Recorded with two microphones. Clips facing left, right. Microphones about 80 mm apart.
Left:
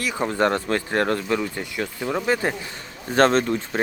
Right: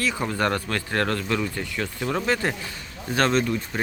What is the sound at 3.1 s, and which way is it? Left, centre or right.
Speech, left.